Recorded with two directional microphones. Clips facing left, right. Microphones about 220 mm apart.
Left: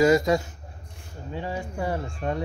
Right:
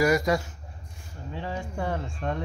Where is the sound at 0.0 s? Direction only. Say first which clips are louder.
Left 3 dB; 25° left (ahead or behind).